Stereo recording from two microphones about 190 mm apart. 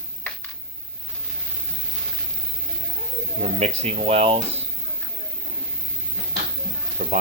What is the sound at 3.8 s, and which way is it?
Speech, 30° right (ahead or behind).